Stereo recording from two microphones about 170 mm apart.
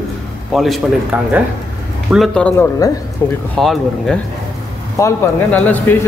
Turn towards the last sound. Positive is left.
turn(degrees=10)  # may be behind; listen again after turning